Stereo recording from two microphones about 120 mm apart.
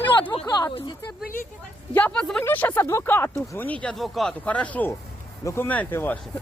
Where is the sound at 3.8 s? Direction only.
Centre (ahead or behind).